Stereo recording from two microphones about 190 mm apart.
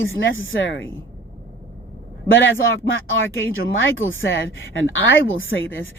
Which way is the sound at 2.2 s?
90° left.